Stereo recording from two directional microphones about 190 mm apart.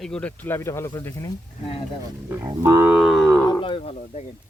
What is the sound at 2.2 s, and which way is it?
Speech, 20° right (ahead or behind).